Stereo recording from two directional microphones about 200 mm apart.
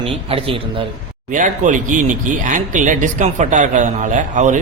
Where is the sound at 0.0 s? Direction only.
25° right (ahead or behind).